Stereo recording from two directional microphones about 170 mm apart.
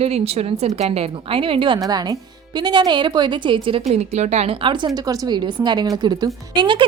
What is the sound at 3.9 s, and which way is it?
A woman's voice, 40° right (ahead or behind).